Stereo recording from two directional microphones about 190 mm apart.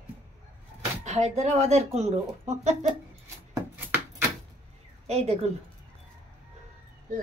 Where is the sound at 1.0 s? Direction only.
35° right (ahead or behind).